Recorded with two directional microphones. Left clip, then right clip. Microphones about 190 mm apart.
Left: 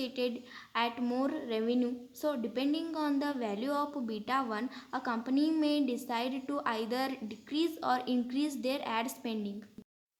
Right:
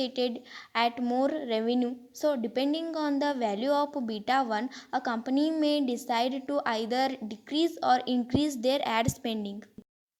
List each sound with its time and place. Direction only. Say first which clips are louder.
0.0 s speech: right 5 dB; 35° right (ahead or behind)